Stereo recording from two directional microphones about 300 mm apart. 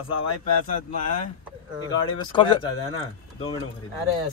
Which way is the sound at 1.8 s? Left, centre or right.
Centre.